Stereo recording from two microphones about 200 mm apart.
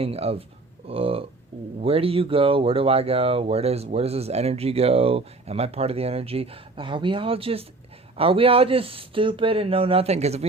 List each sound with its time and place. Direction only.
0.0 s speech: 30° right (ahead or behind)